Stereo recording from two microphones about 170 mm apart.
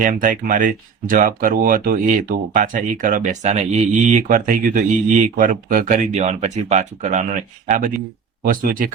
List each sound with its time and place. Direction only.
0.0 s speech: 55° right (ahead or behind)
8.4 s speech: 55° right (ahead or behind)